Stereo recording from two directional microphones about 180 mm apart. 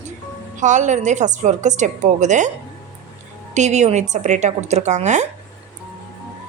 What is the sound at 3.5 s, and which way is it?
A woman's voice, 40° right (ahead or behind).